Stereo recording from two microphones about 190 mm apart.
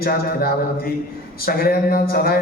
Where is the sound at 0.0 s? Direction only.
50° left (ahead or behind).